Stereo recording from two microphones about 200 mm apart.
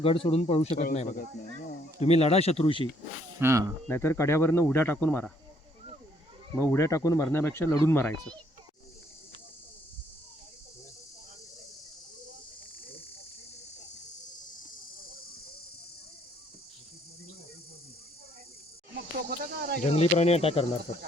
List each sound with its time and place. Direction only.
0.0 s speech: 25° left (ahead or behind)
3.4 s speech: 15° right (ahead or behind)
3.8 s speech: 10° left (ahead or behind)
6.6 s speech: 15° left (ahead or behind)
19.1 s snake: 50° right (ahead or behind)
19.9 s speech: 30° left (ahead or behind)